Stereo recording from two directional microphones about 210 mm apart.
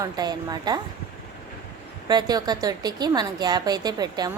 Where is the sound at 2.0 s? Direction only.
20° right (ahead or behind).